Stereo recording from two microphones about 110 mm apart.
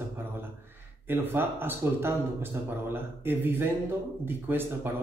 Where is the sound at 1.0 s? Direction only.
20° right (ahead or behind).